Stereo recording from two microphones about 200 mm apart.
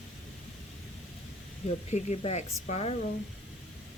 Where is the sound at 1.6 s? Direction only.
35° left (ahead or behind).